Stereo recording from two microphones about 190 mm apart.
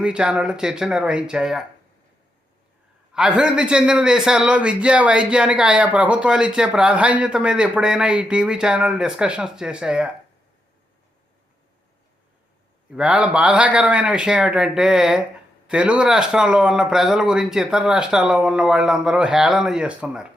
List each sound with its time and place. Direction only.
0.0 s a man's voice: 5° right (ahead or behind)
3.1 s a man's voice: 5° right (ahead or behind)
12.9 s a man's voice: 5° right (ahead or behind)